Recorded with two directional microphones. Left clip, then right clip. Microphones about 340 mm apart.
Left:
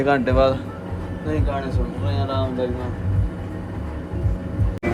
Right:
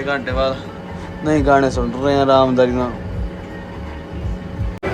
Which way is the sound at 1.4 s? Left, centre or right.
Centre.